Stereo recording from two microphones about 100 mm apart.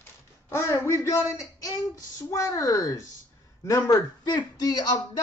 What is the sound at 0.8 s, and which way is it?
Speech, 30° left (ahead or behind).